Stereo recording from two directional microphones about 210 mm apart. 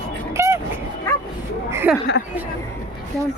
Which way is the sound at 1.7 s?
10° right (ahead or behind).